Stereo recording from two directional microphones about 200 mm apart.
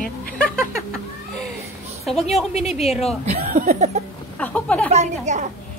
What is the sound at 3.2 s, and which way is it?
Speech, 30° right (ahead or behind).